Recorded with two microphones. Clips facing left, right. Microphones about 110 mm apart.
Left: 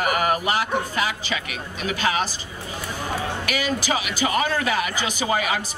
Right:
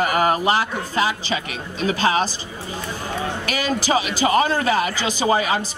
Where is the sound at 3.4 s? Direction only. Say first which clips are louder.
Right 4 dB; 35° right (ahead or behind).